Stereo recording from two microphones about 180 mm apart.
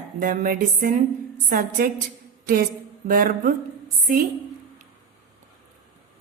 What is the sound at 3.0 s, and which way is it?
Speech, 50° right (ahead or behind).